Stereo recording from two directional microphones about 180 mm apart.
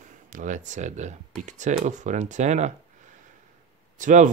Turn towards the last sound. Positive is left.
turn(degrees=-45)  # may be behind; listen again after turning